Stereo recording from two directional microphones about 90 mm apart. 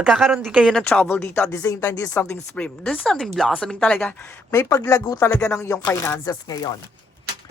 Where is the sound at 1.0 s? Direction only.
25° left (ahead or behind).